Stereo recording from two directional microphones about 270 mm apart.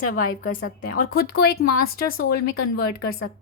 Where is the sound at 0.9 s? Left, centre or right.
Left.